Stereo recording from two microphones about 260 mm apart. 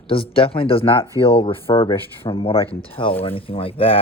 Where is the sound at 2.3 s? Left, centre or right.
Centre.